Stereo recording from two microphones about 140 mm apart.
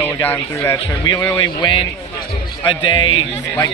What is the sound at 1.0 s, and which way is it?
A man's voice, 25° left (ahead or behind).